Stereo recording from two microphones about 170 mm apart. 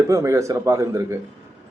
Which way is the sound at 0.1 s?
15° right (ahead or behind).